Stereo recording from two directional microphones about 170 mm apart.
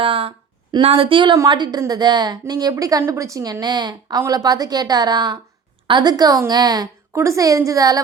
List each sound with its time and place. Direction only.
0.0 s a woman's voice: 30° right (ahead or behind)